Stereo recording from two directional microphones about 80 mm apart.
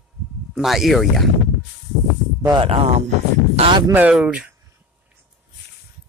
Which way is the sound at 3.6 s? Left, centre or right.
Right.